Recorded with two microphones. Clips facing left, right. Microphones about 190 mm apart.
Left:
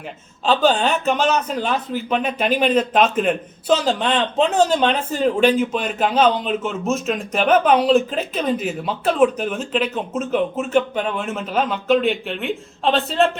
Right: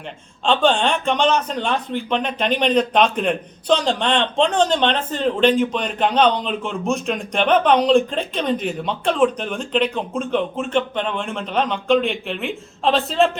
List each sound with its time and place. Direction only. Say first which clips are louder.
0.4 s speech: even; 5° left (ahead or behind)